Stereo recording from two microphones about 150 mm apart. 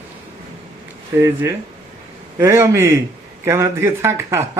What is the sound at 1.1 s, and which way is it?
A man's voice, 15° right (ahead or behind).